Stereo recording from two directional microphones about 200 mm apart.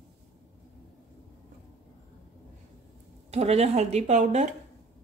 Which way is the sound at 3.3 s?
30° right (ahead or behind).